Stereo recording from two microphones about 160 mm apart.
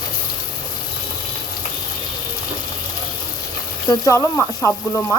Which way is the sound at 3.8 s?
20° left (ahead or behind).